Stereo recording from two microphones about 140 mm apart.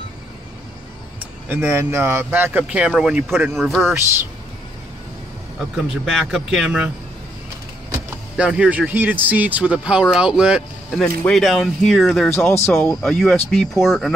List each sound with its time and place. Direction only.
1.5 s speech: 15° right (ahead or behind); by 3.8 s centre (ahead or behind)
3.8 s speech: 15° right (ahead or behind)
6.3 s speech: 5° right (ahead or behind)
8.4 s speech: 5° right (ahead or behind)
10.9 s speech: 5° left (ahead or behind)
12.4 s speech: 15° left (ahead or behind)
12.9 s speech: 5° left (ahead or behind)